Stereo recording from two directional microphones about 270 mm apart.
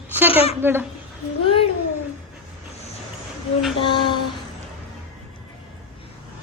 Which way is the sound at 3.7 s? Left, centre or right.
Centre.